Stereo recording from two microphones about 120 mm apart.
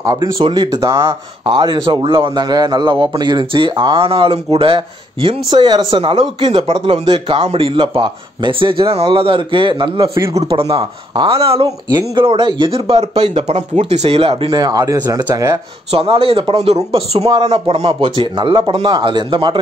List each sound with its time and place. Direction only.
0.0 s speech: 30° right (ahead or behind)
0.4 s a man's voice: 45° right (ahead or behind)
0.7 s speech: 25° right (ahead or behind)
1.4 s a man's voice: 40° right (ahead or behind)
10.7 s speech: 35° right (ahead or behind)
11.2 s a man's voice: 50° right (ahead or behind)
14.5 s speech: 35° right (ahead or behind)
15.9 s a man's voice: 50° right (ahead or behind)